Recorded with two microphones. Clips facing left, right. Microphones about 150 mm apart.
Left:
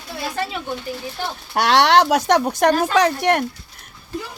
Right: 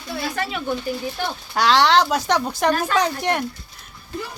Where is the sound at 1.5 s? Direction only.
60° left (ahead or behind).